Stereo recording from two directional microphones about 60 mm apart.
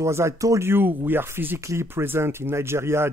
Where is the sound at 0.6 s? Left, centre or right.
Right.